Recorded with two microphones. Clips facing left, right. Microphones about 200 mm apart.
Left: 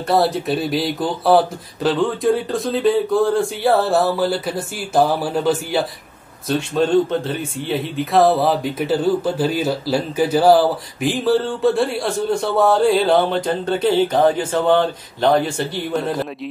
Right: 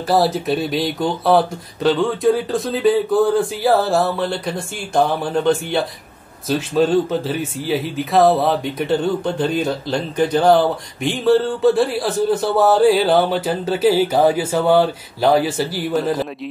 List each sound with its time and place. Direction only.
0.1 s speech: centre (ahead or behind)